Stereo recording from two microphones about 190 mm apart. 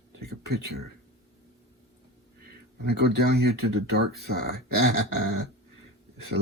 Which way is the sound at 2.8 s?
60° right (ahead or behind).